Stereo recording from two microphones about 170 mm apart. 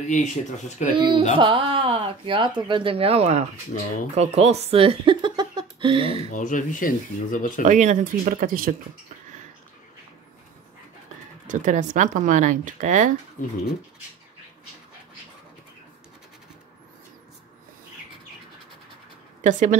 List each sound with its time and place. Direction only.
0.1 s speech: 45° left (ahead or behind)
0.9 s speech: 25° right (ahead or behind)
6.3 s speech: 50° left (ahead or behind)
7.6 s speech: 45° right (ahead or behind)
11.4 s speech: 50° right (ahead or behind)
13.4 s speech: 50° left (ahead or behind)
19.4 s speech: 50° right (ahead or behind)